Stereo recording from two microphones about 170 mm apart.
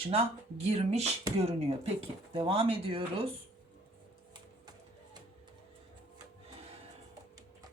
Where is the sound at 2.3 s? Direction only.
30° right (ahead or behind).